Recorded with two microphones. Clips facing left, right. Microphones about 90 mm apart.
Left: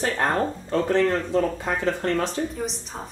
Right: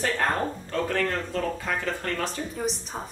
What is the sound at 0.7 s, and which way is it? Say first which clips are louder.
Speech: left 7 dB; 30° left (ahead or behind).